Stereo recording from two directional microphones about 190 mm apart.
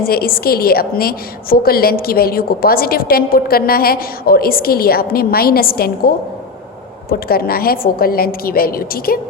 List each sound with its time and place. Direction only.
0.0 s a woman's voice: 50° left (ahead or behind)
7.1 s a woman's voice: 50° left (ahead or behind)